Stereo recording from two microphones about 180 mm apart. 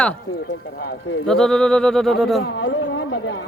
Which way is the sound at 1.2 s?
5° left (ahead or behind).